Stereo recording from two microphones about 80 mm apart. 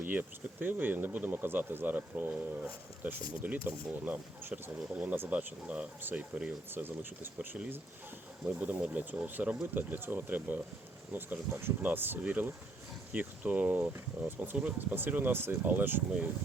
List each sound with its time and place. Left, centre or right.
0.0 s speech: centre